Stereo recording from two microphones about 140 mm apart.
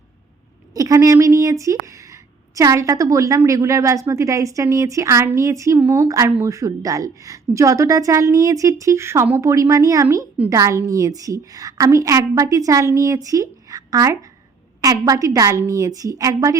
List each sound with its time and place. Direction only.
0.7 s a woman's voice: 25° right (ahead or behind)